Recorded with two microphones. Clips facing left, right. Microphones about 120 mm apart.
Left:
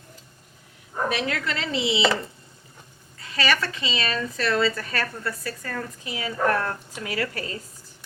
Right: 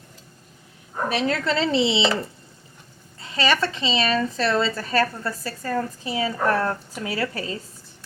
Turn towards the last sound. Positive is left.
turn(degrees=-30)  # may be behind; listen again after turning